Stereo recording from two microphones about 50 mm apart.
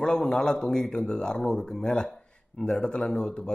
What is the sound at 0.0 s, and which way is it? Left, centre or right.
A man's voice, centre.